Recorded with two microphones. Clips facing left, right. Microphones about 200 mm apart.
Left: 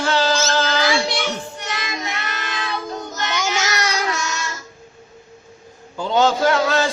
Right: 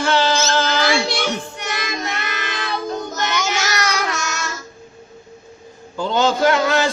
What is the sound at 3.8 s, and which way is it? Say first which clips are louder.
Child singing: even; 35° left (ahead or behind).